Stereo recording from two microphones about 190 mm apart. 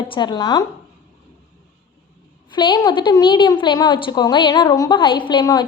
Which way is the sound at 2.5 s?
25° left (ahead or behind).